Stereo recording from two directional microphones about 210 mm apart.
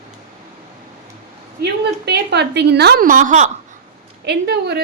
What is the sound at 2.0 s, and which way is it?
A woman's voice, 55° right (ahead or behind).